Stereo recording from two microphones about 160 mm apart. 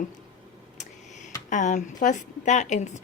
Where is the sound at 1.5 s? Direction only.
50° left (ahead or behind).